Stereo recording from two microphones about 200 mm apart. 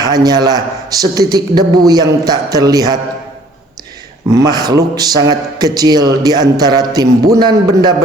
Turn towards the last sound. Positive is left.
turn(degrees=-20)  # may be behind; listen again after turning